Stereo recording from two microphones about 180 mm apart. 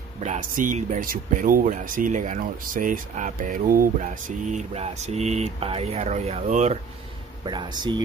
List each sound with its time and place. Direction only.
0.2 s speech: 45° right (ahead or behind)
7.4 s speech: 25° right (ahead or behind)